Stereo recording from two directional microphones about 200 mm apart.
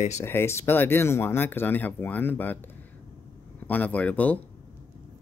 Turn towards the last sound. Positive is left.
turn(degrees=5)  # may be behind; listen again after turning